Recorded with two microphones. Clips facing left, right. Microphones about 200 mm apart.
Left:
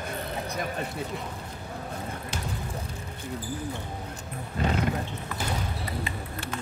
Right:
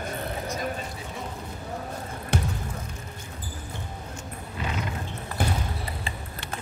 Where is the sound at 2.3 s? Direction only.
60° right (ahead or behind).